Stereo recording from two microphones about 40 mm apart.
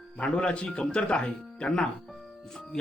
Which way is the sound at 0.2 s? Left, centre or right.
Left.